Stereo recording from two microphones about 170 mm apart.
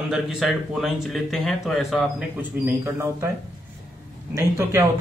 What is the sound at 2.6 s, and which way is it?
Speech, 15° right (ahead or behind).